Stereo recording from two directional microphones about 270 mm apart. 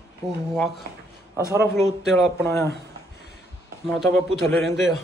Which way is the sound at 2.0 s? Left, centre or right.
Centre.